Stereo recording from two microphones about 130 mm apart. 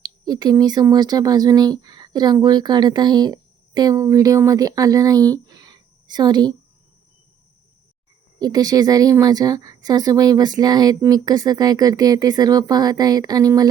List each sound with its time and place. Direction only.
0.0 s speech: 30° right (ahead or behind)
8.4 s a woman's voice: 30° right (ahead or behind)